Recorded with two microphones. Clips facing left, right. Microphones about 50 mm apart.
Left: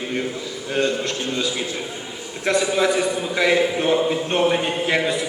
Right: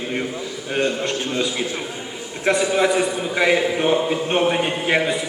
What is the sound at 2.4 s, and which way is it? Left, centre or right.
A man's voice, centre.